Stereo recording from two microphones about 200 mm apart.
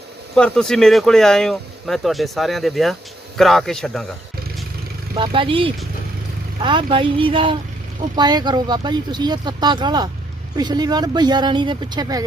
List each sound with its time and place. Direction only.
0.3 s speech: 5° left (ahead or behind)
5.1 s speech: 25° right (ahead or behind)